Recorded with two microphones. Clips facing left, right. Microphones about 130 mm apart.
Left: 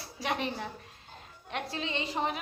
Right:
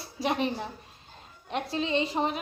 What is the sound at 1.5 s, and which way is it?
Speech, 25° right (ahead or behind).